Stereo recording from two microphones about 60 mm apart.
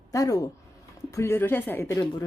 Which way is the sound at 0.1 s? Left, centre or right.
Left.